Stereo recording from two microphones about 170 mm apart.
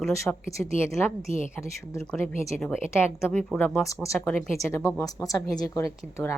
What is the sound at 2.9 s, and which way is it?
A woman's voice, 15° left (ahead or behind).